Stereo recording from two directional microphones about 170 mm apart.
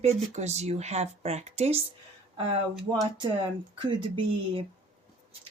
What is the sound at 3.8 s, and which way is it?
Speech, 30° right (ahead or behind).